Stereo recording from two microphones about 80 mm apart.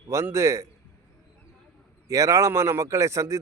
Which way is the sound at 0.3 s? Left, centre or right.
Right.